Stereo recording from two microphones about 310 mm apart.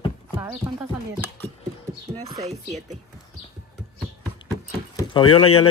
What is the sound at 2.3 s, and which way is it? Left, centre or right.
Speech, right.